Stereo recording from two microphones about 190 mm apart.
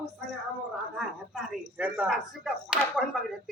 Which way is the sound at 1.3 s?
5° right (ahead or behind).